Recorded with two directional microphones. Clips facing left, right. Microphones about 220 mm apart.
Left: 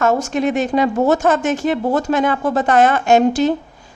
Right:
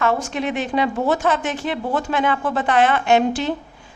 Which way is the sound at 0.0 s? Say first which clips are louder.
Left 5 dB; 45° left (ahead or behind).